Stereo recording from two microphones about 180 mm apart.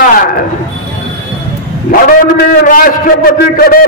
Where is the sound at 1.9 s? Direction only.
55° left (ahead or behind).